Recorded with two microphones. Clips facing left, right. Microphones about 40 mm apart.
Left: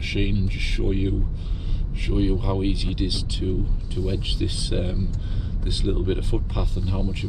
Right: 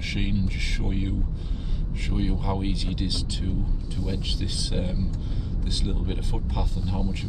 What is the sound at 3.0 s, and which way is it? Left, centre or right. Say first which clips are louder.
Speech: left 4 dB; centre.